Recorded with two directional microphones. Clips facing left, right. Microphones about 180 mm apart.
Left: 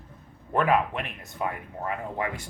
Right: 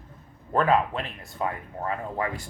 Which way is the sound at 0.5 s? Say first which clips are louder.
Right 1 dB; 30° right (ahead or behind).